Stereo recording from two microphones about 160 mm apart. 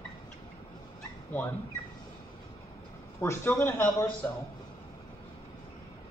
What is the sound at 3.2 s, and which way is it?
A man's voice, 15° left (ahead or behind).